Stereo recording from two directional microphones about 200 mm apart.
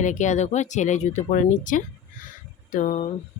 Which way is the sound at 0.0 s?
40° left (ahead or behind).